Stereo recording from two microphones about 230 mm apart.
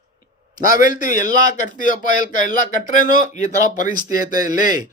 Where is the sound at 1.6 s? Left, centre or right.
Left.